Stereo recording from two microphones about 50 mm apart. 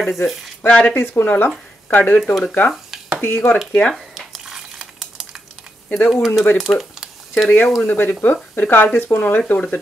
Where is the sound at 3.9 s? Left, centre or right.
Centre.